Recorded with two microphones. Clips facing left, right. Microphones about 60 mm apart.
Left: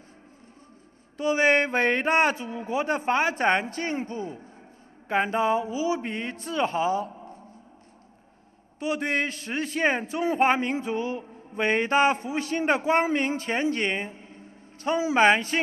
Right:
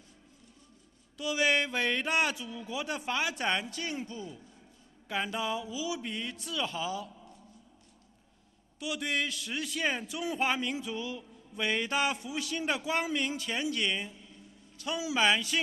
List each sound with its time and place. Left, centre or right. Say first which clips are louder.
1.1 s a man's voice: left 7 dB; left
8.7 s a man's voice: left 7 dB; left